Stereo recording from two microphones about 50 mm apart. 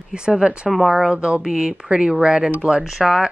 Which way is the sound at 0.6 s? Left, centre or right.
Centre.